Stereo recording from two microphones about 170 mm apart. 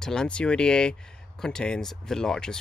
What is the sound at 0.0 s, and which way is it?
Speech, 5° left (ahead or behind).